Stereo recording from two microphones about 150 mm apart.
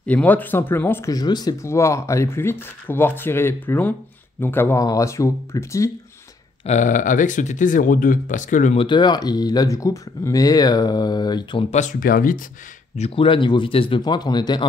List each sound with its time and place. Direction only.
0.0 s speech: 10° left (ahead or behind)
1.1 s speech: 25° left (ahead or behind)
6.6 s speech: 55° left (ahead or behind)
8.7 s speech: 30° left (ahead or behind)
11.7 s speech: 60° left (ahead or behind)
12.9 s speech: 40° left (ahead or behind)